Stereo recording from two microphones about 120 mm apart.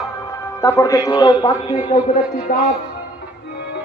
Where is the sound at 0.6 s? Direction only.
25° left (ahead or behind).